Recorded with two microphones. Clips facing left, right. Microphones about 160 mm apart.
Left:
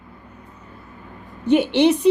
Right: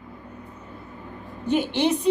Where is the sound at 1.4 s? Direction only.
75° left (ahead or behind).